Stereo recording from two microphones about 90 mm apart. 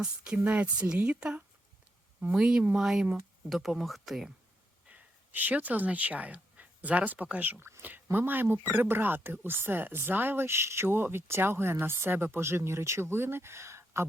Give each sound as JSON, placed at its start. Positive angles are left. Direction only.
{"t": 0.0, "sound": "speech", "side_deg": -10}
{"t": 4.9, "sound": "speech", "side_deg": -20}
{"t": 7.8, "sound": "a sound", "side_deg": -20}
{"t": 8.0, "sound": "speech", "side_deg": -25}